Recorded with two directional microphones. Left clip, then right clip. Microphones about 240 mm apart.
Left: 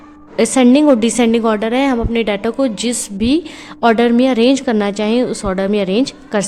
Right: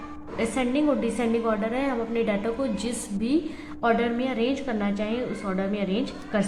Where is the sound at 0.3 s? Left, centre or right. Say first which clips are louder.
Left 14 dB; left.